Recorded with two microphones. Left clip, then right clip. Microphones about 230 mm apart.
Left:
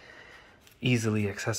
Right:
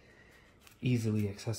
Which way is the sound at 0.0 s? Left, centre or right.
Centre.